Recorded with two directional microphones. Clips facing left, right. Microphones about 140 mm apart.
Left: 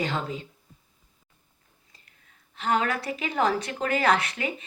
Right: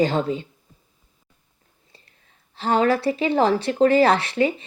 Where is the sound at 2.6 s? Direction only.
30° right (ahead or behind).